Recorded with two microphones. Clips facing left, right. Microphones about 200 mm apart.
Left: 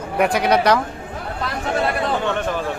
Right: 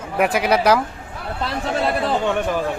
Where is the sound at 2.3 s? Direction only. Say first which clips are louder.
Right 2 dB; 15° right (ahead or behind).